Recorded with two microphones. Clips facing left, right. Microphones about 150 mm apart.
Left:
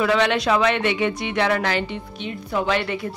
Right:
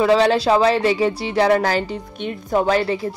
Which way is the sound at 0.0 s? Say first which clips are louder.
Right 4 dB; 35° right (ahead or behind).